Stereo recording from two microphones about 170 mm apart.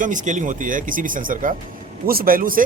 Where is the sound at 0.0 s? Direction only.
50° right (ahead or behind).